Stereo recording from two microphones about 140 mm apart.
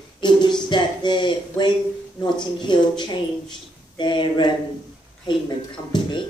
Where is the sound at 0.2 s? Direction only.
30° left (ahead or behind).